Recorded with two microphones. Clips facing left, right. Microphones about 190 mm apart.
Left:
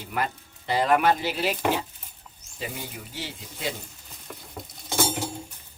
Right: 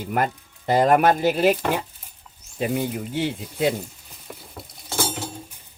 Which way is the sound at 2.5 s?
55° right (ahead or behind).